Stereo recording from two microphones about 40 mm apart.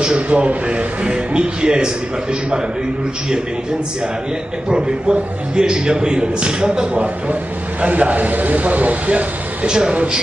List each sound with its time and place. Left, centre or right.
0.0 s a man's voice: right
4.6 s a man's voice: centre
6.9 s a man's voice: right
9.7 s a man's voice: centre